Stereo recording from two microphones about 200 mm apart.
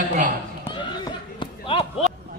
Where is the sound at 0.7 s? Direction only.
25° left (ahead or behind).